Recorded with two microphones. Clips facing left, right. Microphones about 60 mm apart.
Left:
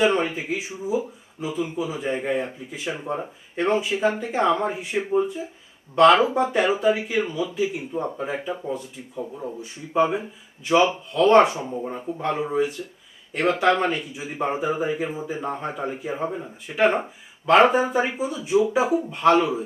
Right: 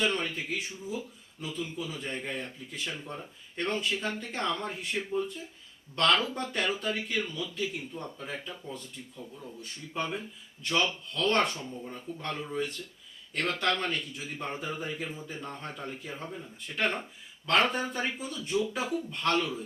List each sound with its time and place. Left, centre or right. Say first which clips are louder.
0.0 s speech: left 9 dB; centre
3.0 s speech: left 12 dB; left
5.0 s speech: left 10 dB; left
9.1 s speech: left 15 dB; left
9.6 s speech: left 14 dB; centre